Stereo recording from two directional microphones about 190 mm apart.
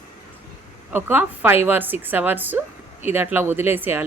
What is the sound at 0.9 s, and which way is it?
A woman's voice, 10° right (ahead or behind).